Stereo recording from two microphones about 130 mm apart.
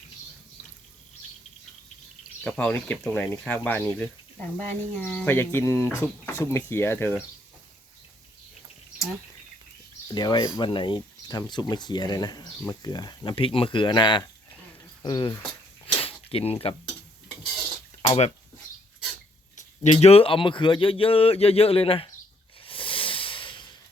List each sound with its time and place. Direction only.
2.4 s speech: 10° left (ahead or behind)
10.1 s speech: 35° left (ahead or behind)
15.9 s a sound: 45° left (ahead or behind)
19.5 s speech: 65° left (ahead or behind); by 22.1 s 45° left (ahead or behind)
22.6 s hiss: 40° left (ahead or behind)